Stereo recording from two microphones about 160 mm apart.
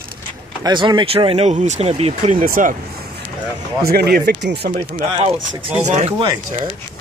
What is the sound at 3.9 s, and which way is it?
Speech, 80° right.